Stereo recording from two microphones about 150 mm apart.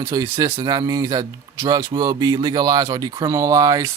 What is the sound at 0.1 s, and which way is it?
Speech, 25° right (ahead or behind).